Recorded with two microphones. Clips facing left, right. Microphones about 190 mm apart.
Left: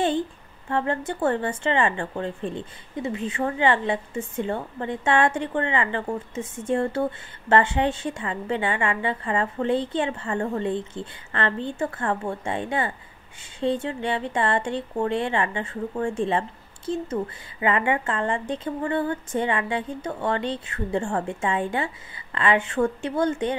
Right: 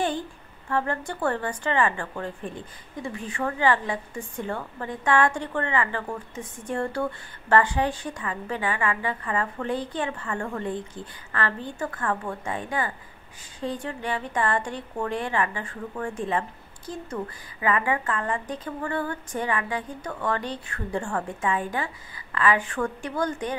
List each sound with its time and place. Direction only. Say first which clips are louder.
0.7 s a woman's voice: left 2 dB; 20° left (ahead or behind)